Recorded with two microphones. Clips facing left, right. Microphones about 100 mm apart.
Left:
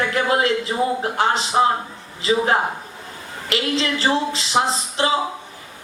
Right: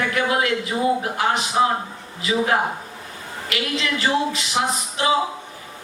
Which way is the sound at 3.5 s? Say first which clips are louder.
Left 3 dB; 30° left (ahead or behind).